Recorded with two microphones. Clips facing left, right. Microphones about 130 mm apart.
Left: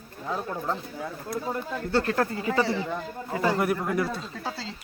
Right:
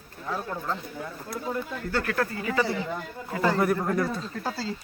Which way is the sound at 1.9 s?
25° left (ahead or behind).